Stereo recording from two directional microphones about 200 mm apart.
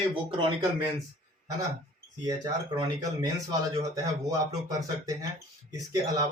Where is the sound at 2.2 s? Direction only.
20° right (ahead or behind).